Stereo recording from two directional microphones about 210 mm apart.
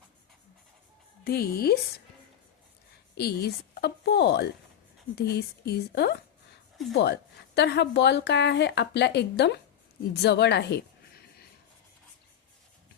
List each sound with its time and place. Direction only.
1.2 s a woman's voice: 50° left (ahead or behind)
3.2 s a woman's voice: 50° left (ahead or behind)